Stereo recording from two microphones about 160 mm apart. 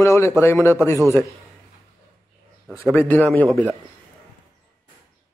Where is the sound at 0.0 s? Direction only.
15° left (ahead or behind).